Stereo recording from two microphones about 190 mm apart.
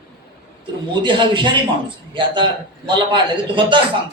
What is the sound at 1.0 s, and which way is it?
A man's voice, 25° right (ahead or behind).